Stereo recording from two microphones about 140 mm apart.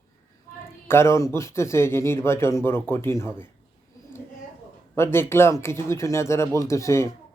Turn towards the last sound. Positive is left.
turn(degrees=20)  # may be behind; listen again after turning